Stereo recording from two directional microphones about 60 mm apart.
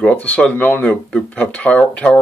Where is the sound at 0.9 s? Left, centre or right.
Centre.